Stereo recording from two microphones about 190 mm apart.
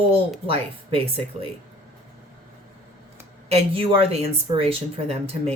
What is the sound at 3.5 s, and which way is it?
Speech, 30° right (ahead or behind).